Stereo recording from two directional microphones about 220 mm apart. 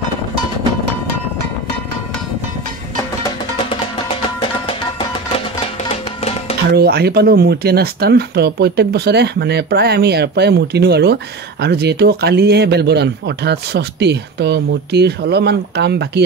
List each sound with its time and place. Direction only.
6.7 s speech: 45° right (ahead or behind)